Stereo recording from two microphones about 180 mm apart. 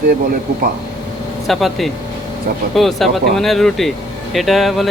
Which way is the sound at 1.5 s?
Centre (ahead or behind).